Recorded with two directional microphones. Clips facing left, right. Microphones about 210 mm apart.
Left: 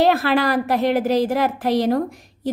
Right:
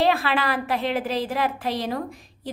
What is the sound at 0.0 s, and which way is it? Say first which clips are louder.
A woman's voice: left 5 dB; 45° left (ahead or behind).